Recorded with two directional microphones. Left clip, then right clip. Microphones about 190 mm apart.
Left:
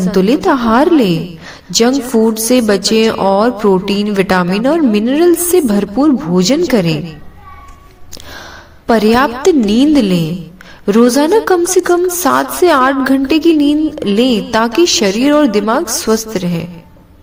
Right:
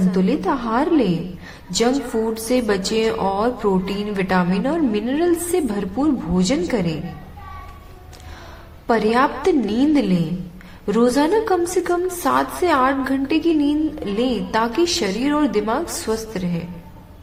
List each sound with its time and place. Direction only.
0.1 s a woman's voice: 40° left (ahead or behind)
8.9 s a woman's voice: 40° left (ahead or behind)